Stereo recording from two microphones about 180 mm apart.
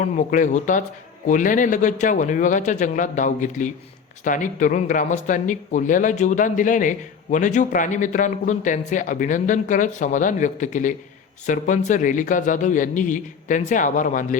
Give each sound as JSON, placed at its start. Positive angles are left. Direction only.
{"t": 0.0, "sound": "speech", "side_deg": 45}